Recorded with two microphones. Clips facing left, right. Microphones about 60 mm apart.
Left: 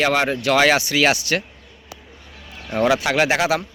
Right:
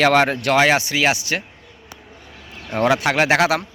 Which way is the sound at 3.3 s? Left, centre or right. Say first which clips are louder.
Right 3 dB; right.